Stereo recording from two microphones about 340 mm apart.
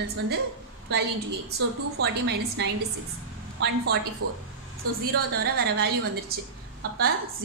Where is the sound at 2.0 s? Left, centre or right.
Right.